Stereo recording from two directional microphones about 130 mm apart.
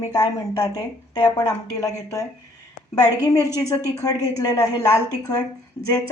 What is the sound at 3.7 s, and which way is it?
Speech, 25° left (ahead or behind).